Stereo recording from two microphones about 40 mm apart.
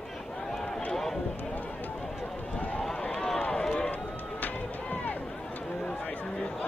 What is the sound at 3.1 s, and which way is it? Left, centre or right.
Run, centre.